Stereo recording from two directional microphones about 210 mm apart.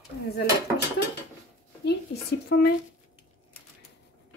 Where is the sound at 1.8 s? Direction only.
50° left (ahead or behind).